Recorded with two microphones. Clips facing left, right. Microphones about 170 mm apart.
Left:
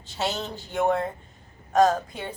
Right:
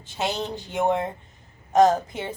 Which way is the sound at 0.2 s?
15° right (ahead or behind).